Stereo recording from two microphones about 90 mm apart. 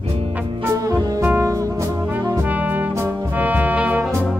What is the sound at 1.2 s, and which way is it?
Music, 20° right (ahead or behind).